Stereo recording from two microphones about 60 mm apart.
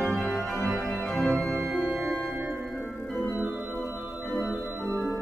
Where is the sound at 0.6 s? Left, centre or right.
Right.